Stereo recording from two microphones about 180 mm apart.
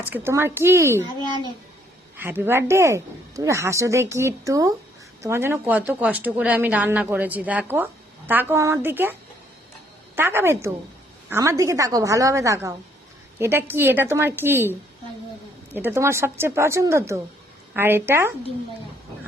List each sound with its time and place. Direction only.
0.1 s a woman's voice: 15° right (ahead or behind)
10.2 s a woman's voice: 10° right (ahead or behind)